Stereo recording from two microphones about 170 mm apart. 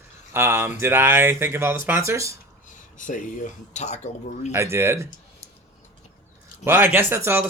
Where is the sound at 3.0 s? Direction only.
45° left (ahead or behind).